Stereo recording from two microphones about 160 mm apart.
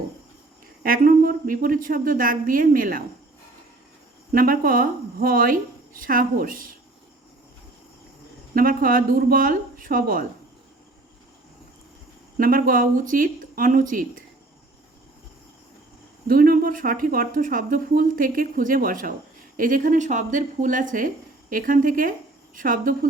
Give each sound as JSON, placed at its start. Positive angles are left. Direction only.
{"t": 0.8, "sound": "speech", "side_deg": -65}
{"t": 4.3, "sound": "speech", "side_deg": -60}
{"t": 8.5, "sound": "speech", "side_deg": -60}
{"t": 12.4, "sound": "speech", "side_deg": -60}
{"t": 16.2, "sound": "speech", "side_deg": -65}